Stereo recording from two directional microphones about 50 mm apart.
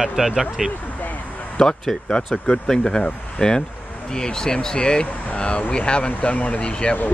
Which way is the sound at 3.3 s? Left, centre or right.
Centre.